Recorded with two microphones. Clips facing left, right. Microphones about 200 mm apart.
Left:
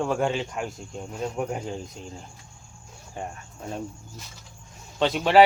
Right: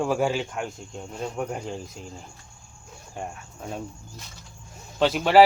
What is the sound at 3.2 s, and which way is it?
Speech, centre (ahead or behind).